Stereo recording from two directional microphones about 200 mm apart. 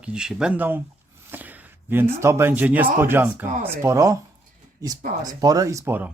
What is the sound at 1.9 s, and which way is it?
A man's voice, 10° right (ahead or behind).